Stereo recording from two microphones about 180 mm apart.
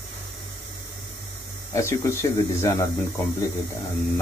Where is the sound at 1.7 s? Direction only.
15° left (ahead or behind).